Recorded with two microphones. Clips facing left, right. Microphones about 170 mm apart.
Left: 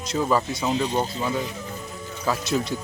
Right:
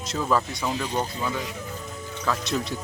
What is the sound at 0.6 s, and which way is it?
Speech, 20° left (ahead or behind).